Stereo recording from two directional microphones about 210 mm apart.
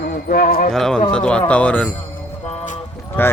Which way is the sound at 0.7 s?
Centre (ahead or behind).